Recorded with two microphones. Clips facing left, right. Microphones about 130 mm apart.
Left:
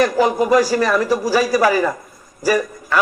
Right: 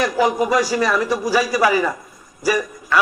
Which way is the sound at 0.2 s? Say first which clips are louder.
Left 1 dB; 10° right (ahead or behind).